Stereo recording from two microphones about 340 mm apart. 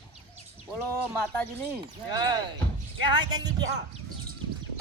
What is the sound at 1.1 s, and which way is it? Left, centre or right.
Speech, centre.